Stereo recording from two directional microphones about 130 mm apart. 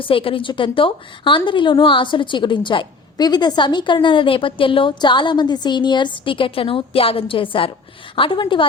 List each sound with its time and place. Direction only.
0.0 s a woman's voice: 45° left (ahead or behind)